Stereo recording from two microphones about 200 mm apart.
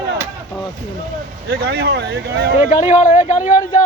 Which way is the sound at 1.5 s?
55° right (ahead or behind).